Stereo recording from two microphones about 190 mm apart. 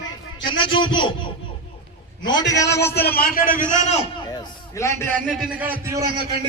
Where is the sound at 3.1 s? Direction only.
50° left (ahead or behind).